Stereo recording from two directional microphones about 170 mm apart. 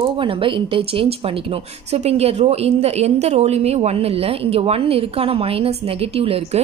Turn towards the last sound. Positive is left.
turn(degrees=-35)  # may be behind; listen again after turning